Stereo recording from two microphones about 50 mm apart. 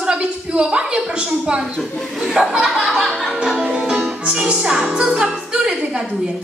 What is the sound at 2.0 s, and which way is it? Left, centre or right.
Speech, centre.